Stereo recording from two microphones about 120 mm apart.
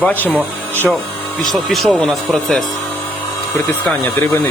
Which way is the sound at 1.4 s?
Centre (ahead or behind).